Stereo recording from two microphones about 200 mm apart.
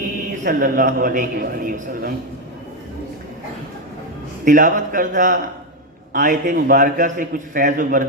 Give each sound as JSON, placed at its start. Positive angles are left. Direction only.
{"t": 0.4, "sound": "a man's voice", "side_deg": -40}
{"t": 4.4, "sound": "a man's voice", "side_deg": -40}